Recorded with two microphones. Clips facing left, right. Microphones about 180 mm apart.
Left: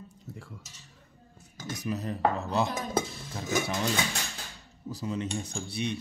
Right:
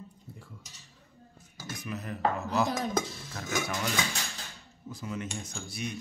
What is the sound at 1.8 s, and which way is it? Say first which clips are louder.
Speech: left 3 dB; 35° left (ahead or behind).